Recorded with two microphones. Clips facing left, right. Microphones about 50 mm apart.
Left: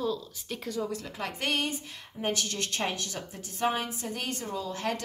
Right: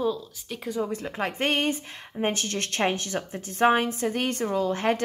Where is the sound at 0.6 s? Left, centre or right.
Right.